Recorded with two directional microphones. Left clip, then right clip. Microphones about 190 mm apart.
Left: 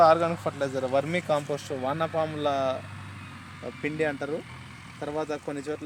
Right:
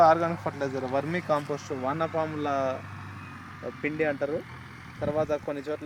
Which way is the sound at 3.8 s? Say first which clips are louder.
Right 1 dB; 65° left (ahead or behind).